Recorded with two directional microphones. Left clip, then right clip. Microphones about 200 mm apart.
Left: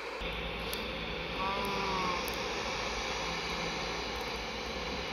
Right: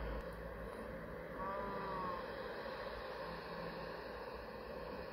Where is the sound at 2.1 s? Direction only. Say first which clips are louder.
Left 10 dB; 25° left (ahead or behind).